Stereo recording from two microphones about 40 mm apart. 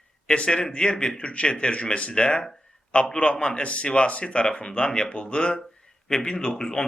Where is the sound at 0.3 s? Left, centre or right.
Left.